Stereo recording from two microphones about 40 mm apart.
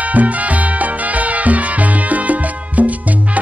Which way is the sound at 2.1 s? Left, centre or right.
Right.